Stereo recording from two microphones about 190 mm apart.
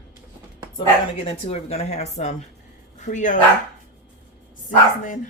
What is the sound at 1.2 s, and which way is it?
Speech, 35° left (ahead or behind).